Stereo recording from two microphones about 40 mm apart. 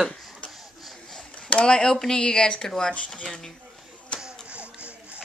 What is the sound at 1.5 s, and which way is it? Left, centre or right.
Speech, left.